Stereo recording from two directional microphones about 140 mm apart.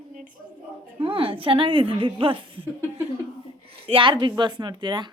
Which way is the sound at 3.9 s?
35° right (ahead or behind).